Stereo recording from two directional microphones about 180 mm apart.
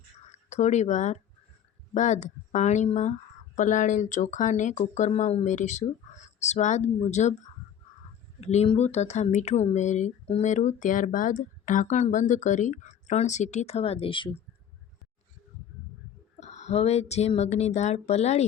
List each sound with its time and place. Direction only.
0.3 s speech: 40° left (ahead or behind)
8.4 s speech: 35° left (ahead or behind)
16.4 s speech: 40° left (ahead or behind)